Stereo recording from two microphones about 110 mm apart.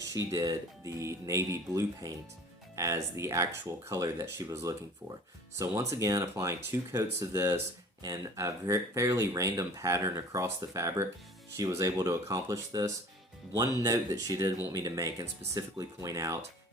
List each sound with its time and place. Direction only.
0.0 s speech: 30° right (ahead or behind)